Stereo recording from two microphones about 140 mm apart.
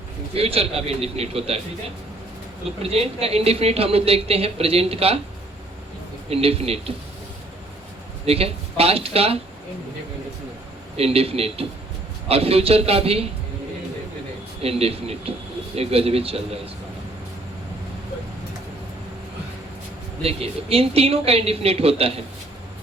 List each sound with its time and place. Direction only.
0.3 s speech: 45° right (ahead or behind)
2.9 s speech: 45° right (ahead or behind)
6.3 s speech: 45° right (ahead or behind)
8.2 s speech: 45° right (ahead or behind)
10.9 s speech: 45° right (ahead or behind)
14.6 s speech: 45° right (ahead or behind)
20.2 s speech: 45° right (ahead or behind)